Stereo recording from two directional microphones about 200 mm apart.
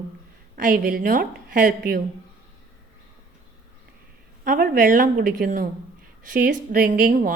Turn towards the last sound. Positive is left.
turn(degrees=-45)  # may be behind; listen again after turning